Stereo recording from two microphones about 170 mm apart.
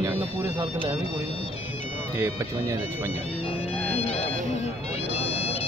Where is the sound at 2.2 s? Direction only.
15° right (ahead or behind).